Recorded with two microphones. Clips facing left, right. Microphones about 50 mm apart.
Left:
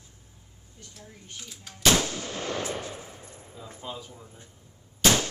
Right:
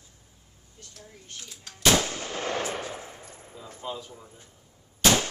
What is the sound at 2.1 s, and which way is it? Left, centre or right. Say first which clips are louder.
Gunshot: right 2 dB; right.